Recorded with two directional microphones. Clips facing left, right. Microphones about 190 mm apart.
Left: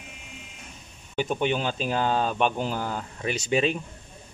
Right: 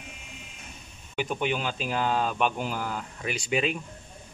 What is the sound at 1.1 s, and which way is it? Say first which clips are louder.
Speech: left 3 dB; 25° left (ahead or behind).